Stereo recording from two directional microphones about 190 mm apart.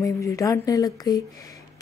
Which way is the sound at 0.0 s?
15° left (ahead or behind).